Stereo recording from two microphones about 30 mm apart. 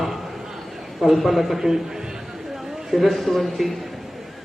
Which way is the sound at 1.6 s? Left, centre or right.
Centre.